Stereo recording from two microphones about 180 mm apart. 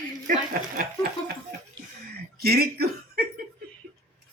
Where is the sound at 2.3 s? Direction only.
60° right (ahead or behind).